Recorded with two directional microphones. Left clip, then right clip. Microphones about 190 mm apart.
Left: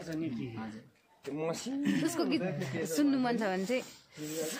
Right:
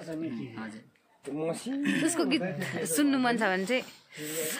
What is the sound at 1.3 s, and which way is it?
Speech, 20° right (ahead or behind).